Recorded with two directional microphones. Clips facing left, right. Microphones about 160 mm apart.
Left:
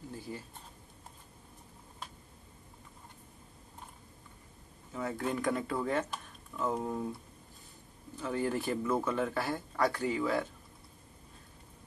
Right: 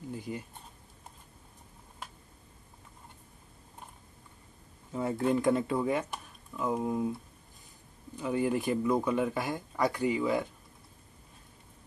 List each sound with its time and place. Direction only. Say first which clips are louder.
0.1 s speech: right 5 dB; 15° right (ahead or behind)
4.9 s speech: right 6 dB; 25° right (ahead or behind); by 7.2 s 10° right (ahead or behind)
8.2 s speech: right 4 dB; 15° right (ahead or behind)